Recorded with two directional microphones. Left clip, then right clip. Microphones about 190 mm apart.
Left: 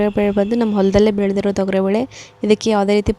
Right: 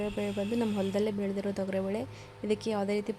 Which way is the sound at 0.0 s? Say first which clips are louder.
Left 17 dB; 50° left (ahead or behind).